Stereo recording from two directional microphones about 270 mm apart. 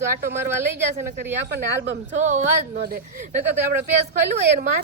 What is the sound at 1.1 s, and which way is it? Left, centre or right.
Speech, right.